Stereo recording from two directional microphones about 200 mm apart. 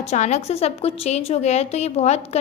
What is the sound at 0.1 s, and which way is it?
A woman's voice, 35° left (ahead or behind).